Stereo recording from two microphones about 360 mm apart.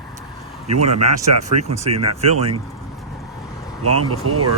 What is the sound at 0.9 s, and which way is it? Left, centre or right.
Speech, right.